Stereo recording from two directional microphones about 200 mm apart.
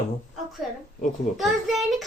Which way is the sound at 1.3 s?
Centre (ahead or behind).